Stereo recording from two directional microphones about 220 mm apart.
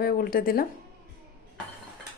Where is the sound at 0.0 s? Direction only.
45° left (ahead or behind).